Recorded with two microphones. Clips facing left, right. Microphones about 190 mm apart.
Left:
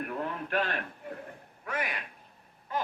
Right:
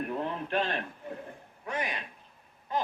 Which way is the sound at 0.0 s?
20° right (ahead or behind).